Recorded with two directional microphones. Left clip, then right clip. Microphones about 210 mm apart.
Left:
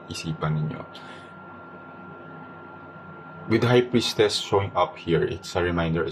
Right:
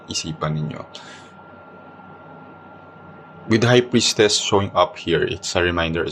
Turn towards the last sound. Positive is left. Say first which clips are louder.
# right 5 dB
turn(degrees=-30)  # may be behind; listen again after turning